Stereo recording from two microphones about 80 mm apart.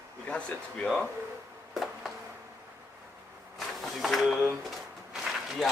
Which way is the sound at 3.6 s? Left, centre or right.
Centre.